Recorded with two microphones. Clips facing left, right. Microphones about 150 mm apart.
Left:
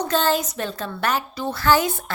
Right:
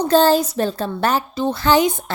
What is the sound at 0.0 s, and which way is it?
Speech, 35° right (ahead or behind).